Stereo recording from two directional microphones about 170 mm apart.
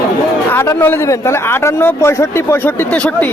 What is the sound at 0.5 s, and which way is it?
A man's voice, 15° left (ahead or behind).